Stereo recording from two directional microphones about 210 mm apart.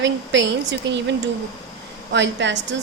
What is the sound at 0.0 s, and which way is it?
A woman's voice, 60° right (ahead or behind).